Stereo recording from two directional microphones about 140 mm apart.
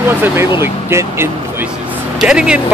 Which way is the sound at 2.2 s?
5° right (ahead or behind).